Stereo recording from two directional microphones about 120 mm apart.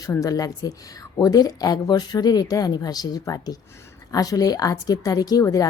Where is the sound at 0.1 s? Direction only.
30° left (ahead or behind).